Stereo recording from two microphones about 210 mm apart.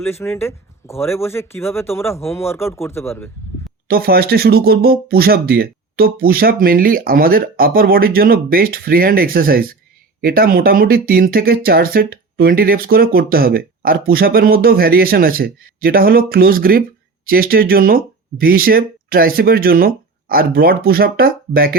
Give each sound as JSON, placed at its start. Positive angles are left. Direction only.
{"t": 0.0, "sound": "speech", "side_deg": 10}
{"t": 3.8, "sound": "speech", "side_deg": -45}